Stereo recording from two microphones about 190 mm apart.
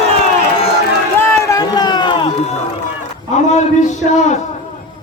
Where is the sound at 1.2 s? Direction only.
20° left (ahead or behind).